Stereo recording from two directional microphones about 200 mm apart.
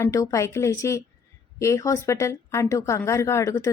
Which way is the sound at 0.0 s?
15° left (ahead or behind).